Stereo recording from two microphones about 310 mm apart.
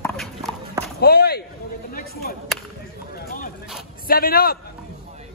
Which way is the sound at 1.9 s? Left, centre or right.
Left.